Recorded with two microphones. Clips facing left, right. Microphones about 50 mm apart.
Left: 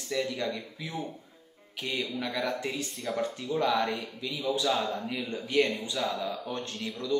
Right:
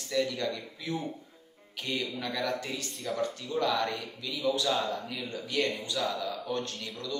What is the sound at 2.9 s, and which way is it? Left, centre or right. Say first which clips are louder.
Speech: left 1 dB; centre.